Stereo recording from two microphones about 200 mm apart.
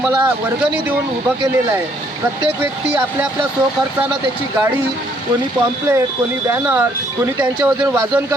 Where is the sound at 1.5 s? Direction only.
10° right (ahead or behind).